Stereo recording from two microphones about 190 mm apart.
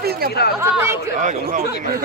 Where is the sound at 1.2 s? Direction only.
45° right (ahead or behind).